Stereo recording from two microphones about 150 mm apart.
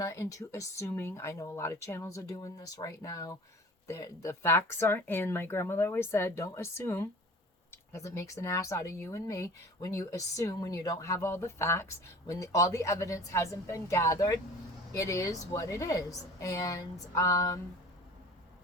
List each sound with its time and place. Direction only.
0.0 s speech: 20° left (ahead or behind)